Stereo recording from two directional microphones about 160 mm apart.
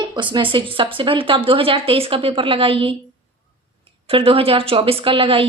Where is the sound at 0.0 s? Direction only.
30° right (ahead or behind).